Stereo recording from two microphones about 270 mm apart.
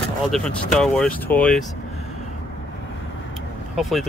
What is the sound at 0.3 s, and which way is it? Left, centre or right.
Speech, centre.